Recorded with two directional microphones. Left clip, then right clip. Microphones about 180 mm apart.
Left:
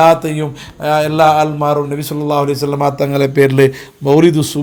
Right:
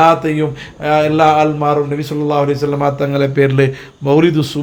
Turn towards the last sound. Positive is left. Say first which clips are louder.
# left 2 dB
turn(degrees=35)  # may be behind; listen again after turning